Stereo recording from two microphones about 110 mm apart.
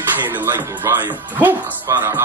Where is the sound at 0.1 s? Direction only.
20° right (ahead or behind).